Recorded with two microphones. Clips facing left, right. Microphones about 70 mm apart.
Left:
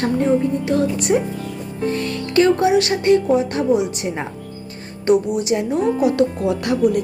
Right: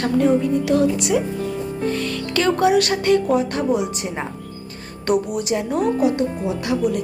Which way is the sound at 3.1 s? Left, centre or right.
Right.